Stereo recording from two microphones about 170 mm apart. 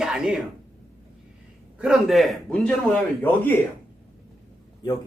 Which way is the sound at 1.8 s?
Centre (ahead or behind).